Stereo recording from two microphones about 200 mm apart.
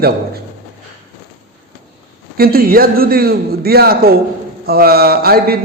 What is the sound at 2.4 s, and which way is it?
A man's voice, 45° right (ahead or behind).